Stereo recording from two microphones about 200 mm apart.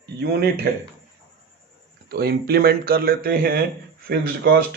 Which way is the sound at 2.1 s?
50° right (ahead or behind).